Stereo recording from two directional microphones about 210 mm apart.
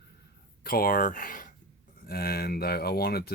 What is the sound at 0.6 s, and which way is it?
Speech, 45° left (ahead or behind).